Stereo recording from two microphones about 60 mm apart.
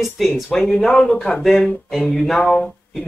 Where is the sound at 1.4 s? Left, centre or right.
Centre.